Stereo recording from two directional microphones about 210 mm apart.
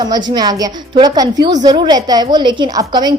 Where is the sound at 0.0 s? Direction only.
20° right (ahead or behind).